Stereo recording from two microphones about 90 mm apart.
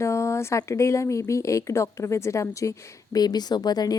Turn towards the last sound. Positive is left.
turn(degrees=50)  # may be behind; listen again after turning